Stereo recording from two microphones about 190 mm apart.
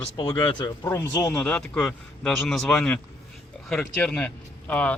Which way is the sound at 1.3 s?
5° left (ahead or behind).